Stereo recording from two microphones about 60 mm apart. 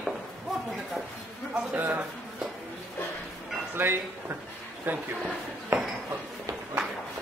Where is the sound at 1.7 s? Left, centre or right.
Right.